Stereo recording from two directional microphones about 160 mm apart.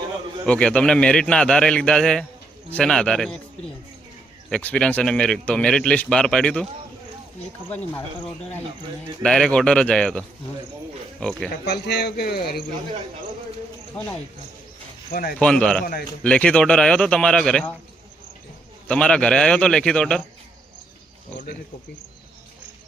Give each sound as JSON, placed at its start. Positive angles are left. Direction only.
{"t": 0.4, "sound": "speech", "side_deg": 5}
{"t": 4.4, "sound": "speech", "side_deg": 5}
{"t": 9.2, "sound": "speech", "side_deg": 5}
{"t": 11.6, "sound": "speech", "side_deg": 90}
{"t": 15.1, "sound": "speech", "side_deg": 65}
{"t": 15.4, "sound": "speech", "side_deg": 5}
{"t": 18.9, "sound": "speech", "side_deg": 5}